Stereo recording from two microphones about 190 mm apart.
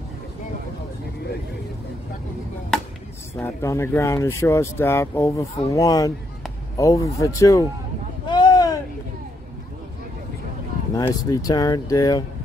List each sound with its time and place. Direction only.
3.3 s speech: 15° left (ahead or behind)
8.3 s a sound: 20° left (ahead or behind)
11.0 s speech: 20° left (ahead or behind)